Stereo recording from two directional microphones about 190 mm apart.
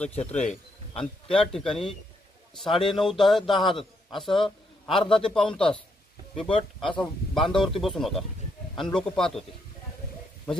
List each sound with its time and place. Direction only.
0.3 s speech: 35° left (ahead or behind)
1.3 s a man's voice: 5° left (ahead or behind)